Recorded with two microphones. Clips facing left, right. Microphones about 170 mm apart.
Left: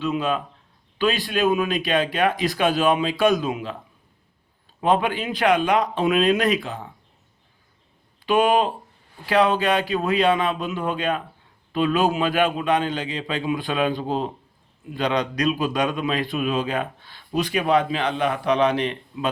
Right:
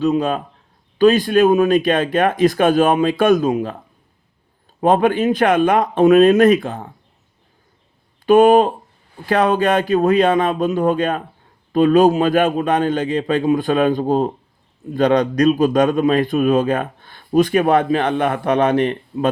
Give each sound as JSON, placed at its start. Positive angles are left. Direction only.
{"t": 0.0, "sound": "a man's voice", "side_deg": -45}
{"t": 4.8, "sound": "a man's voice", "side_deg": -45}
{"t": 8.3, "sound": "a man's voice", "side_deg": -45}